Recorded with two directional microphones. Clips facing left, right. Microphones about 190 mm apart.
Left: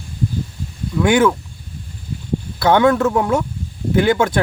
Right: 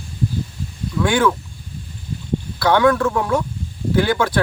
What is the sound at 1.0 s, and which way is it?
Speech, 20° left (ahead or behind).